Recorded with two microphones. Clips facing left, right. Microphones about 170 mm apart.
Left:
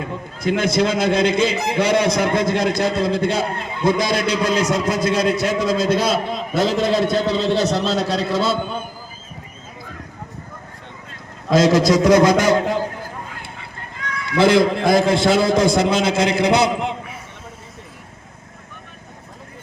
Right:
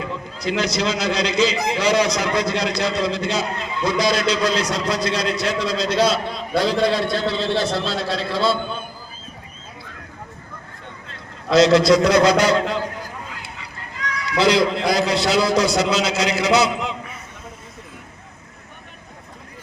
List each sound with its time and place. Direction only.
0.0 s a man's voice: 50° left (ahead or behind)
11.5 s a man's voice: 45° left (ahead or behind)